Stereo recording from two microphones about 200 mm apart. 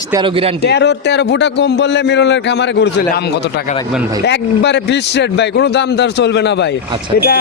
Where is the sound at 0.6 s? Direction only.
55° left (ahead or behind).